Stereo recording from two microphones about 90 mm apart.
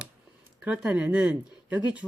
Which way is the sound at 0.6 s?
15° right (ahead or behind).